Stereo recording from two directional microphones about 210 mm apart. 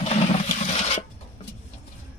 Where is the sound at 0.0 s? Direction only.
30° left (ahead or behind).